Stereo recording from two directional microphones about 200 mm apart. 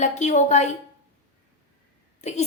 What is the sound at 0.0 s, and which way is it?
Speech, 35° left (ahead or behind).